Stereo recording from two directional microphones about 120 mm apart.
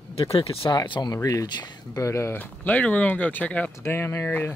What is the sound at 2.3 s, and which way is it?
Speech, 15° left (ahead or behind).